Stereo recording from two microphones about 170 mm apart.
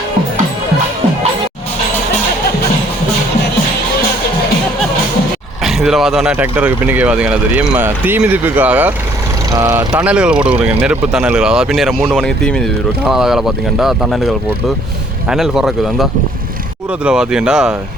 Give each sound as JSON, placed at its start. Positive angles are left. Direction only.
{"t": 5.6, "sound": "speech", "side_deg": 0}
{"t": 9.9, "sound": "speech", "side_deg": -5}